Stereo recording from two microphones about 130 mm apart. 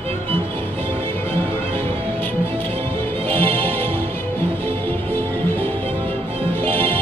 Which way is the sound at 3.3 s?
45° right (ahead or behind).